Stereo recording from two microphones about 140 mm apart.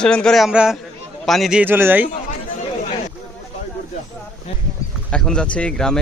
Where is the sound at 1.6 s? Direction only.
15° right (ahead or behind).